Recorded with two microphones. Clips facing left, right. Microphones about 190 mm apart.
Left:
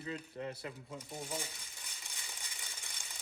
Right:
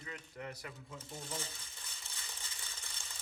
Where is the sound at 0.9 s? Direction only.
15° left (ahead or behind).